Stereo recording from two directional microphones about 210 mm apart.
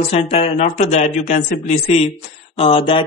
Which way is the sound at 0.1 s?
25° left (ahead or behind).